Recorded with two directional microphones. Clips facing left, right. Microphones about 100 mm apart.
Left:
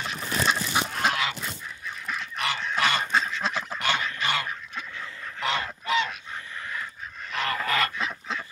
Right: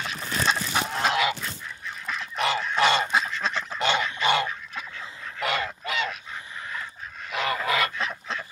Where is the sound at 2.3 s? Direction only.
25° right (ahead or behind).